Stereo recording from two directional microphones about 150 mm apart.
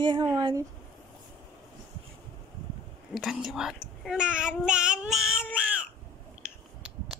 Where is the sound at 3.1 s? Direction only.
5° right (ahead or behind).